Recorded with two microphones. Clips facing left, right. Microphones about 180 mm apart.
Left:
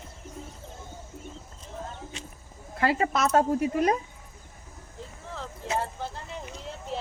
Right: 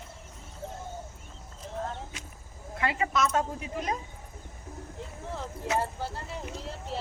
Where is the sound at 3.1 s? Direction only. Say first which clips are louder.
Left 5 dB; 55° left (ahead or behind).